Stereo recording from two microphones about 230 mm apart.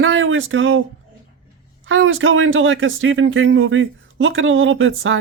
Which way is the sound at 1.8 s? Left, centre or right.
Right.